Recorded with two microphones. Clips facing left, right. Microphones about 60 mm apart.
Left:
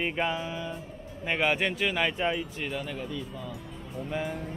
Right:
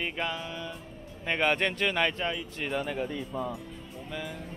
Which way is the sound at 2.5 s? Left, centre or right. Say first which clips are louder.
Right 3 dB; centre.